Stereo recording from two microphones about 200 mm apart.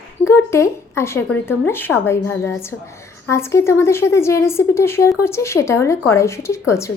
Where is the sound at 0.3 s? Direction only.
15° left (ahead or behind).